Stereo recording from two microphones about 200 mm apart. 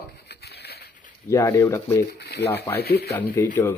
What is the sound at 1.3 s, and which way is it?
Speech, 15° left (ahead or behind).